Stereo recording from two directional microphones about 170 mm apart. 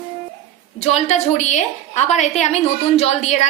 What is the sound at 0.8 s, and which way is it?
A woman's voice, 40° left (ahead or behind).